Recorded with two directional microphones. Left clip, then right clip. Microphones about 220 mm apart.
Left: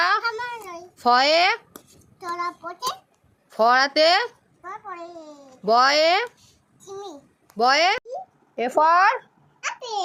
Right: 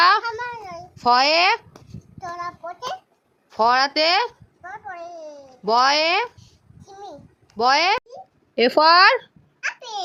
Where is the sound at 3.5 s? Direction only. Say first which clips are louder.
Even; centre (ahead or behind).